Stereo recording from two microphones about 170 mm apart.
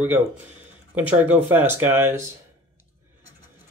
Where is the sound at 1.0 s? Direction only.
10° right (ahead or behind).